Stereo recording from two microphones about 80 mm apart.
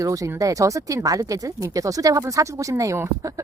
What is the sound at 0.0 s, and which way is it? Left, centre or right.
Speech, right.